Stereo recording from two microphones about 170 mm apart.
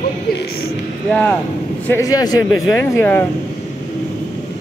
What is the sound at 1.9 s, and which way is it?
Speech, 20° left (ahead or behind).